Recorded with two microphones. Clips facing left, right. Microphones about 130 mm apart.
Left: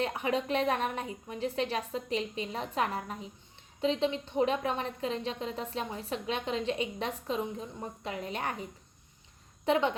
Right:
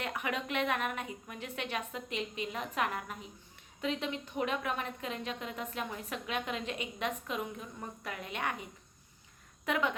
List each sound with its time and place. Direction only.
0.0 s a woman's voice: 30° left (ahead or behind)
9.6 s a woman's voice: 30° left (ahead or behind)